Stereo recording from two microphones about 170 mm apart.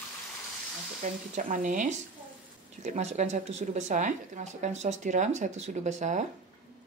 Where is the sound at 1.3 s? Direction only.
50° right (ahead or behind).